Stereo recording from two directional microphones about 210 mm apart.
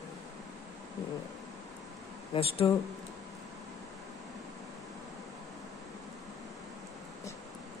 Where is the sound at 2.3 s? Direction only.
30° left (ahead or behind).